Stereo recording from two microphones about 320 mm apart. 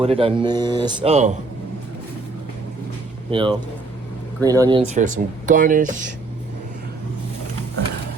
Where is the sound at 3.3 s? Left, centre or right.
Centre.